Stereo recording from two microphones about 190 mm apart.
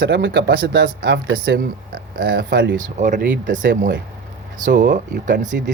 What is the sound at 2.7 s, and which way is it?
Speech, 40° right (ahead or behind).